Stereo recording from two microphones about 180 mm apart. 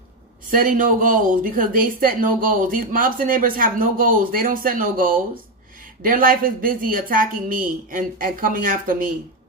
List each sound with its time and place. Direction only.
0.5 s speech: 50° right (ahead or behind)